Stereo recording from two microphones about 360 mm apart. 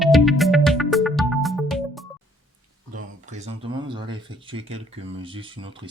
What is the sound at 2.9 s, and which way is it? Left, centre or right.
Speech, centre.